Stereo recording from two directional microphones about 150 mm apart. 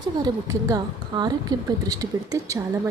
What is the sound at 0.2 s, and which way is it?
A woman's voice, 25° right (ahead or behind).